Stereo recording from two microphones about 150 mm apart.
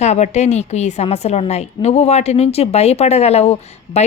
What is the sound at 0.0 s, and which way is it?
A woman's voice, 50° left (ahead or behind).